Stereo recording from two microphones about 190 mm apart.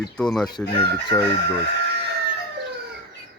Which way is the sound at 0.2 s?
Centre (ahead or behind).